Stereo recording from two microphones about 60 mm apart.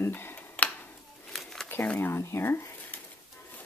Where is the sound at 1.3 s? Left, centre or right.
Centre.